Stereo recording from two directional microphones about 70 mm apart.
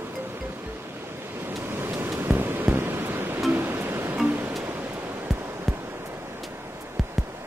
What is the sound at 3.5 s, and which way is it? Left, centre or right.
Music, right.